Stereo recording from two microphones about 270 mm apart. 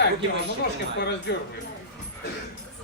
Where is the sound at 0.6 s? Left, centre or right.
Left.